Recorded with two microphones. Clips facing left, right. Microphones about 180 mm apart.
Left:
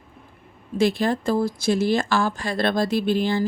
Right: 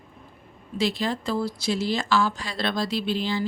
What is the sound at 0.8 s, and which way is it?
Speech, 50° left (ahead or behind).